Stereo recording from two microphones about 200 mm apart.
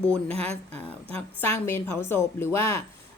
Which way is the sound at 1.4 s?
10° left (ahead or behind).